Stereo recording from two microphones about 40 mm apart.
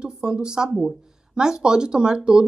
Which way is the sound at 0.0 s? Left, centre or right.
Centre.